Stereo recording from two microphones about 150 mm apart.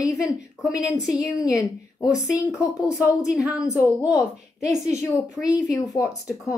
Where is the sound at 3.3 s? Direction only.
5° right (ahead or behind).